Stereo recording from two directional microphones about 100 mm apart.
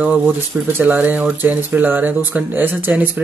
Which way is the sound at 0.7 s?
20° right (ahead or behind).